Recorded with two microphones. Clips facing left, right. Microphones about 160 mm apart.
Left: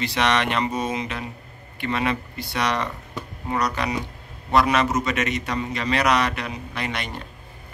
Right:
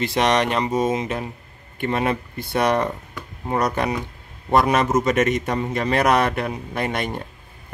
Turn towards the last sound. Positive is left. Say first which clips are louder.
# right 5 dB
turn(degrees=-50)  # may be behind; listen again after turning